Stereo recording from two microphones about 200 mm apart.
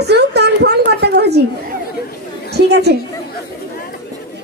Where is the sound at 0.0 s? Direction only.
55° right (ahead or behind).